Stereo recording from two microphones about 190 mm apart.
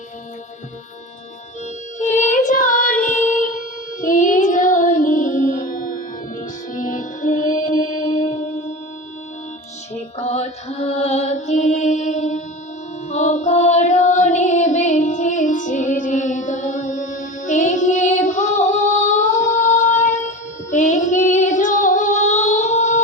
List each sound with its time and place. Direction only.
2.0 s child singing: 40° left (ahead or behind)
4.0 s music: 45° left (ahead or behind)
9.9 s music: 35° left (ahead or behind)